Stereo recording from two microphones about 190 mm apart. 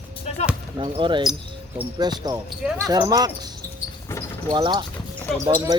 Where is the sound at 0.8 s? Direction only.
25° right (ahead or behind).